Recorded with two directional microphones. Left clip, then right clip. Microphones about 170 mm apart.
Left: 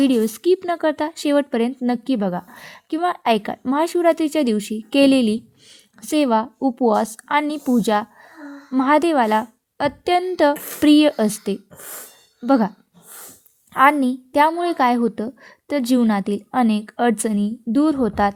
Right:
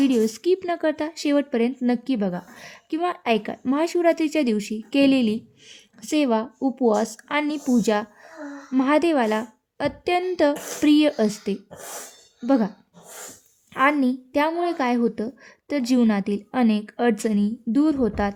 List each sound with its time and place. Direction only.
0.0 s a woman's voice: 30° left (ahead or behind)
14.0 s a woman's voice: 30° left (ahead or behind)